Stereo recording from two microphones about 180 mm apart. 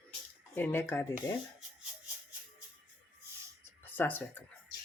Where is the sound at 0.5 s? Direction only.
10° left (ahead or behind).